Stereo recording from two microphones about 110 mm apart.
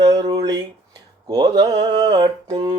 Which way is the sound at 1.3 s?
40° right (ahead or behind).